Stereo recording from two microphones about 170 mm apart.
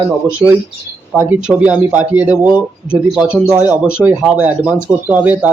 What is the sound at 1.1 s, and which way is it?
Speech, 10° right (ahead or behind).